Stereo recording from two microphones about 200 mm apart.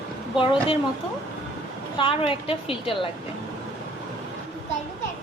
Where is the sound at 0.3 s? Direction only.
25° left (ahead or behind).